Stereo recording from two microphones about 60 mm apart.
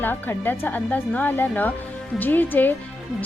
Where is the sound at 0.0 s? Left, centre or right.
Left.